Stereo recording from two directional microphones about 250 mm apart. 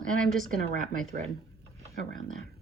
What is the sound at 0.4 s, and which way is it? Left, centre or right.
Speech, right.